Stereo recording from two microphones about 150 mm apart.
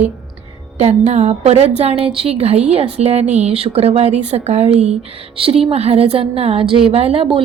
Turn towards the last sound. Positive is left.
turn(degrees=-35)  # may be behind; listen again after turning